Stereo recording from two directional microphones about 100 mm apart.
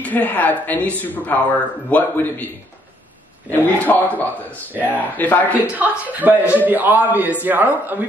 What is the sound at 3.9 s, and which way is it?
A woman's voice, 15° left (ahead or behind).